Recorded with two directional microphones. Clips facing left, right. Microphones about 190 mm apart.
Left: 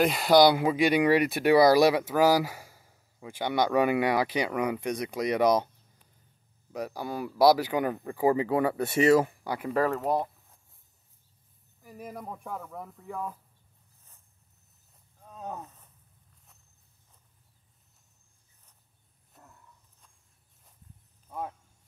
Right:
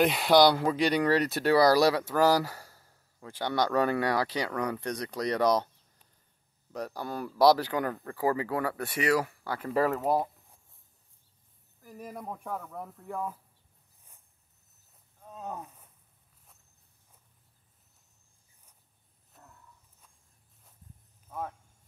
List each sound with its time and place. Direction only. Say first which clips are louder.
0.0 s speech: left 1 dB; centre (ahead or behind)
6.7 s speech: left 2 dB; 10° left (ahead or behind)
9.7 s speech: even; 5° right (ahead or behind)
11.8 s speech: even; 5° left (ahead or behind)
15.2 s wild animals: even; 5° right (ahead or behind)
21.3 s a sound: left 1 dB; 10° left (ahead or behind)